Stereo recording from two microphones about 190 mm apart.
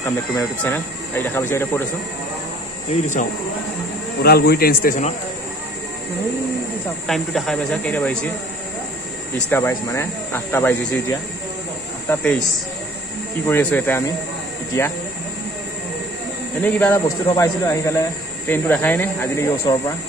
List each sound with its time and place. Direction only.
0.0 s speech: 10° left (ahead or behind)
2.9 s speech: 40° left (ahead or behind)
4.2 s speech: 55° left (ahead or behind)
7.1 s speech: centre (ahead or behind)
9.5 s speech: 15° left (ahead or behind)
13.5 s speech: 10° left (ahead or behind)
16.6 s speech: 10° left (ahead or behind)